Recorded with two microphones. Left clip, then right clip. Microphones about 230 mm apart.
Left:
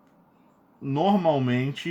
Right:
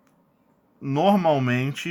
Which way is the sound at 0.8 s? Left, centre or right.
Right.